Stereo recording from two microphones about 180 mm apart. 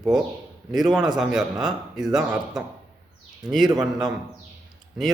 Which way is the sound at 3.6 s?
20° right (ahead or behind).